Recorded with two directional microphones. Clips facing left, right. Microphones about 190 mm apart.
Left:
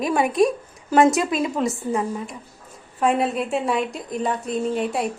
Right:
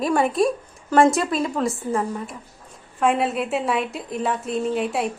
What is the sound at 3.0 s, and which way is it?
A woman's voice, centre (ahead or behind).